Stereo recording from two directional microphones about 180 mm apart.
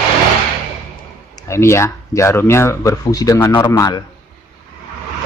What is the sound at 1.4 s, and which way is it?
Speech, 15° left (ahead or behind).